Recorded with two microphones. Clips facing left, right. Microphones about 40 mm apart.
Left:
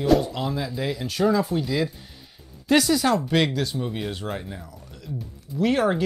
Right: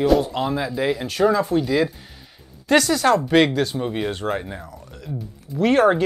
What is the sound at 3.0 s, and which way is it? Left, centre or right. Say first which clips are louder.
Speech: right 5 dB; centre.